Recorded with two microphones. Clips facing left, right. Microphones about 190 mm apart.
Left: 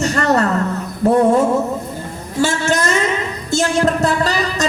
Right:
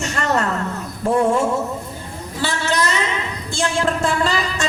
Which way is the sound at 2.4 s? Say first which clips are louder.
Left 5 dB; 45° left (ahead or behind).